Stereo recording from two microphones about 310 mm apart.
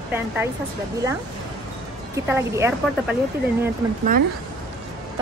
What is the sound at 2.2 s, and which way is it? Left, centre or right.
Speech, centre.